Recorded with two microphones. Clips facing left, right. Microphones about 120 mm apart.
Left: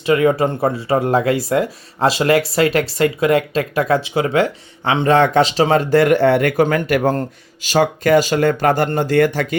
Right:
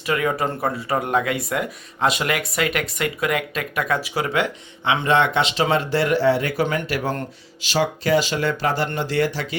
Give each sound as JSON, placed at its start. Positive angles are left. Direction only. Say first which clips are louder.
{"t": 0.0, "sound": "speech", "louder": "left 7 dB", "side_deg": 25}